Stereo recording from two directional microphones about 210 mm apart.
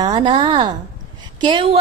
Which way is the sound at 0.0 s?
20° right (ahead or behind).